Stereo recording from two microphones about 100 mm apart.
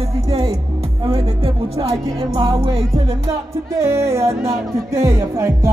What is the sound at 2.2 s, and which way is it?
Music, 45° right (ahead or behind).